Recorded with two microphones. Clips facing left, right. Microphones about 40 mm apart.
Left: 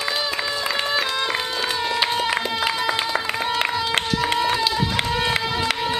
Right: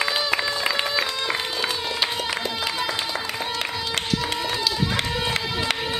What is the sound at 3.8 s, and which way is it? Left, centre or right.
Run, left.